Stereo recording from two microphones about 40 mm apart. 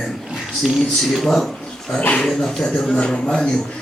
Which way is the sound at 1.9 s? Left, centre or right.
Left.